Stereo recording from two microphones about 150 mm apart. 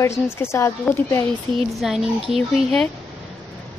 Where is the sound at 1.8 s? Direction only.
Centre (ahead or behind).